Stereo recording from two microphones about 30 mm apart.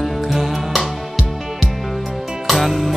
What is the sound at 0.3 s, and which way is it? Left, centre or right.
Music, centre.